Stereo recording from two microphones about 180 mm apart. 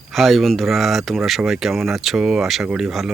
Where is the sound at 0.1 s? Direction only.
Centre (ahead or behind).